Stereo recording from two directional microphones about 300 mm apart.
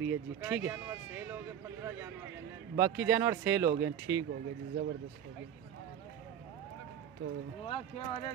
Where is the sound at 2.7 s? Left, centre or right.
Centre.